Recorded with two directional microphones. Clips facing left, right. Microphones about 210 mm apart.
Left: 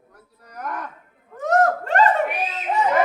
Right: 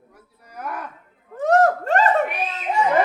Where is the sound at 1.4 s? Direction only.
30° right (ahead or behind).